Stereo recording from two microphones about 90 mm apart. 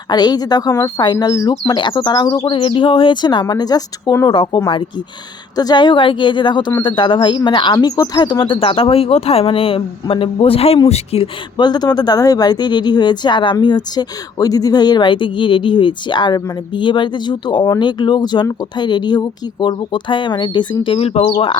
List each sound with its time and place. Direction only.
0.1 s speech: 50° left (ahead or behind)
2.5 s speech: 75° left (ahead or behind); by 4.1 s 45° left (ahead or behind)
4.3 s speech: 65° left (ahead or behind)
5.5 s speech: 50° left (ahead or behind); by 11.6 s 90° left
11.6 s speech: 50° left (ahead or behind); by 21.6 s 80° left